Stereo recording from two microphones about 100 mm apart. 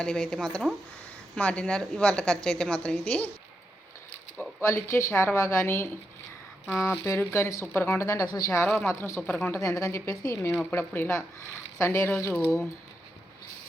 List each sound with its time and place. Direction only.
0.0 s a woman's voice: 10° left (ahead or behind)
1.4 s a woman's voice: 15° left (ahead or behind)
4.6 s a woman's voice: 25° left (ahead or behind)
7.6 s a woman's voice: 15° left (ahead or behind)
7.9 s a woman's voice: 30° left (ahead or behind)
8.8 s a woman's voice: 25° left (ahead or behind)
9.6 s a woman's voice: 35° left (ahead or behind)
10.7 s a woman's voice: 20° left (ahead or behind)